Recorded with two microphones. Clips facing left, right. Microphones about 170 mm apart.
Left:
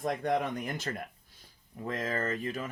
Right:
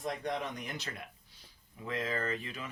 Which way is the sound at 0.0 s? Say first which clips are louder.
Left 6 dB; 55° left (ahead or behind).